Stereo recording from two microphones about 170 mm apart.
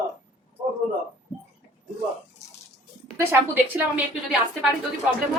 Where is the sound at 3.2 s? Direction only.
10° right (ahead or behind).